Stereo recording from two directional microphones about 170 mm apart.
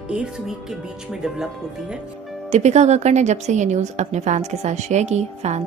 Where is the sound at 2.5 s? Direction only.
40° right (ahead or behind).